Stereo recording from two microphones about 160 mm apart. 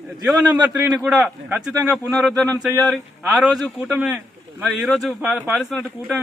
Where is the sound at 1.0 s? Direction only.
Centre (ahead or behind).